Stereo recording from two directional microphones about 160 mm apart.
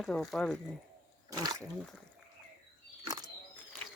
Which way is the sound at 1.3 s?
25° right (ahead or behind).